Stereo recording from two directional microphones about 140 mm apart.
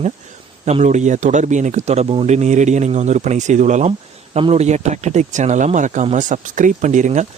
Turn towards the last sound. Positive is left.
turn(degrees=-60)  # may be behind; listen again after turning